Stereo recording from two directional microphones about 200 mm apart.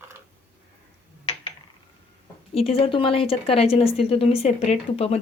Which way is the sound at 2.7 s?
25° left (ahead or behind).